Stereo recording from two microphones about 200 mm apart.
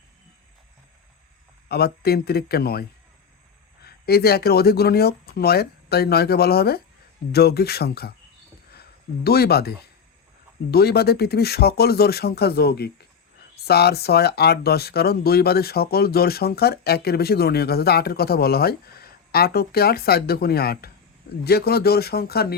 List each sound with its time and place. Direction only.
1.6 s speech: 50° left (ahead or behind)
3.8 s speech: 50° left (ahead or behind)